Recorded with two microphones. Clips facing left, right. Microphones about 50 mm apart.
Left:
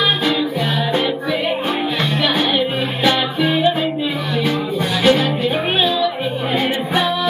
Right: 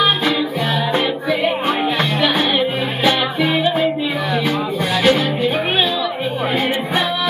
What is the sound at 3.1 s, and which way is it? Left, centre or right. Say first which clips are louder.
Music: even; right.